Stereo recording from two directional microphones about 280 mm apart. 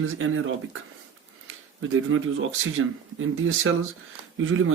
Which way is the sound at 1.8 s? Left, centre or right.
Right.